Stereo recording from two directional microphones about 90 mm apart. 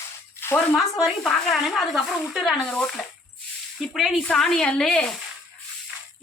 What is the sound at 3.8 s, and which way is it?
Speech, 5° right (ahead or behind).